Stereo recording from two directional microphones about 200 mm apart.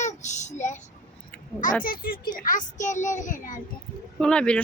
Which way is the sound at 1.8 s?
45° left (ahead or behind).